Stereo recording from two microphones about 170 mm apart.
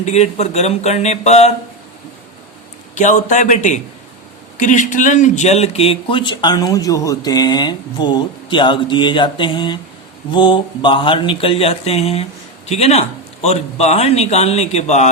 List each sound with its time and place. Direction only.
0.0 s a man's voice: 40° left (ahead or behind)
2.9 s a man's voice: 45° left (ahead or behind)